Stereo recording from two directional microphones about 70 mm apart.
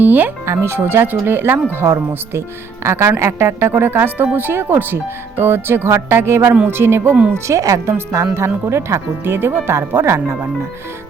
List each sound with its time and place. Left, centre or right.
0.0 s speech: right
0.4 s speech: right